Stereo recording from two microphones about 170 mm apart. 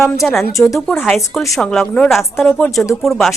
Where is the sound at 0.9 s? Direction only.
5° left (ahead or behind).